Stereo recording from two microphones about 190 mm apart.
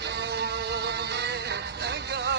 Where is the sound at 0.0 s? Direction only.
65° right (ahead or behind).